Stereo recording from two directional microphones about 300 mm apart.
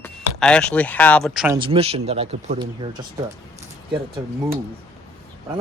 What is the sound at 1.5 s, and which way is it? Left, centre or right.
Speech, centre.